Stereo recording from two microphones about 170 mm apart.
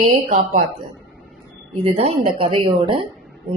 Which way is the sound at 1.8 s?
40° right (ahead or behind).